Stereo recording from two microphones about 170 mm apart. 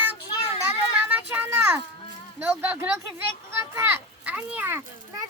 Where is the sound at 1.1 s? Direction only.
10° right (ahead or behind).